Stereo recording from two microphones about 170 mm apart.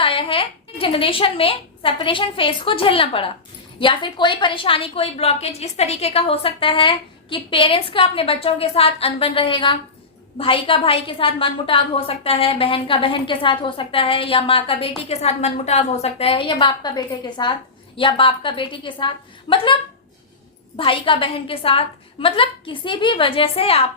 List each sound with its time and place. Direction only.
0.0 s a woman's voice: 30° left (ahead or behind)